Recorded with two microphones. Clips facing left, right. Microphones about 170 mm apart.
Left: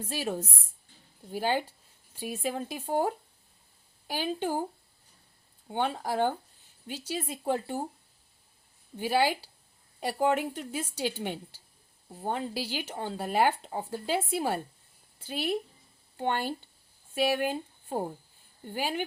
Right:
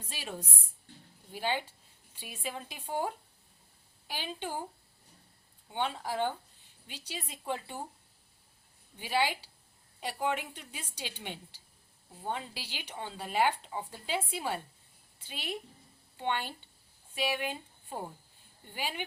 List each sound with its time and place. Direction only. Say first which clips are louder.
0.0 s speech: left 9 dB; 45° left (ahead or behind)
5.6 s speech: left 4 dB; 45° left (ahead or behind)
9.0 s speech: left 5 dB; 45° left (ahead or behind)